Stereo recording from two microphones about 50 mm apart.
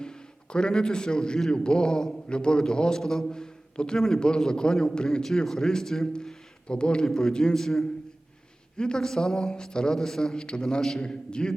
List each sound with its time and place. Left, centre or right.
0.0 s a man's voice: centre